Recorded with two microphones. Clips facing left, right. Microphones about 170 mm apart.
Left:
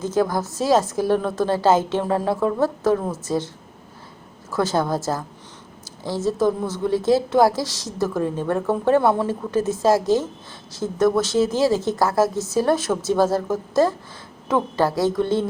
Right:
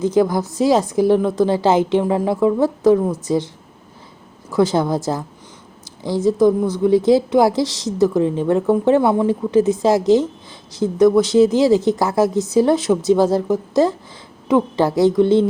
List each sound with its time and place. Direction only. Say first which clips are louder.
0.0 s a woman's voice: right 5 dB; 20° right (ahead or behind)
4.5 s a woman's voice: right 5 dB; 20° right (ahead or behind)